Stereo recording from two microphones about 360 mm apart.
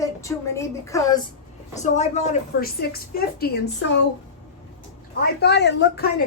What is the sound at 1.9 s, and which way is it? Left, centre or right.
Speech, centre.